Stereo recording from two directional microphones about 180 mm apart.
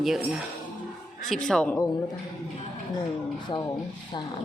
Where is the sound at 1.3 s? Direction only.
5° left (ahead or behind).